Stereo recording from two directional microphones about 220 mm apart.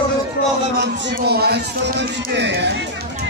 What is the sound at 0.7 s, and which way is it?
A man's voice, 50° right (ahead or behind).